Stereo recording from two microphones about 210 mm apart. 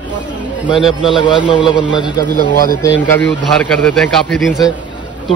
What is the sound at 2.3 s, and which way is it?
Speech, 40° left (ahead or behind).